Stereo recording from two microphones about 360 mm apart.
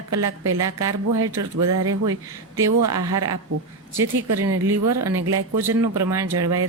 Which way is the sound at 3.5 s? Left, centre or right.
Right.